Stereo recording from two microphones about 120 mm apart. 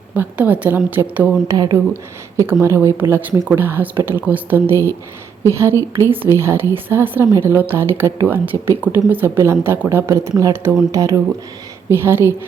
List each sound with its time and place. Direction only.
0.2 s a woman's voice: 15° right (ahead or behind)
1.5 s speech: 30° right (ahead or behind)
2.3 s a woman's voice: 20° right (ahead or behind)